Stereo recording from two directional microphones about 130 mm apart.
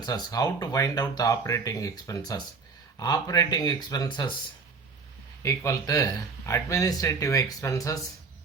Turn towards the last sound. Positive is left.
turn(degrees=25)  # may be behind; listen again after turning